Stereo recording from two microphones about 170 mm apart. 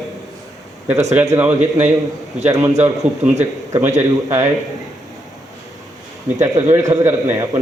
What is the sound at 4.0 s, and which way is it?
Speech, 15° right (ahead or behind).